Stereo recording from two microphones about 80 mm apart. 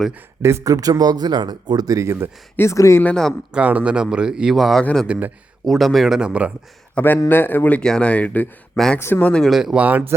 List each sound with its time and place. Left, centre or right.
0.4 s speech: right
0.7 s speech: right
2.0 s speech: right
2.6 s speech: left
3.5 s speech: centre
4.8 s speech: centre
5.0 s speech: centre
5.6 s speech: centre
6.9 s speech: left
7.8 s speech: centre
8.7 s speech: centre
9.0 s speech: left
9.4 s speech: centre
9.7 s speech: centre